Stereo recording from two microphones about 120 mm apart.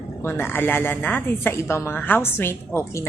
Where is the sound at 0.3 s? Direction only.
15° left (ahead or behind).